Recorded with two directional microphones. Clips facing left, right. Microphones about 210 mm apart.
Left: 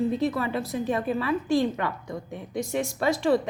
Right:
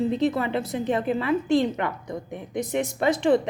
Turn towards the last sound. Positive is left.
turn(degrees=-20)  # may be behind; listen again after turning